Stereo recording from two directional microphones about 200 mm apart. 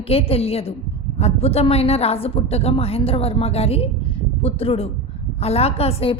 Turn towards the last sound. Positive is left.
turn(degrees=30)  # may be behind; listen again after turning